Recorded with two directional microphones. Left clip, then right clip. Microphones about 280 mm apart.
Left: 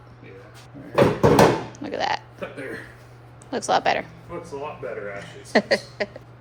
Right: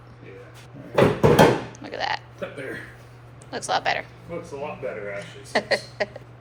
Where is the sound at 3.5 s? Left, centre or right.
Left.